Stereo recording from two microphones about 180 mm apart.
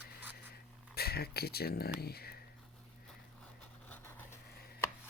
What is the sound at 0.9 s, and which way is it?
Speech, 60° left (ahead or behind).